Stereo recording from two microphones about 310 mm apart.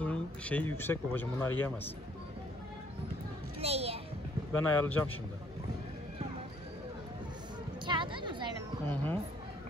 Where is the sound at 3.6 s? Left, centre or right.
Centre.